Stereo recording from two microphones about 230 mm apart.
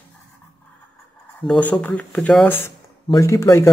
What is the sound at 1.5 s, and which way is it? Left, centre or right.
Speech, centre.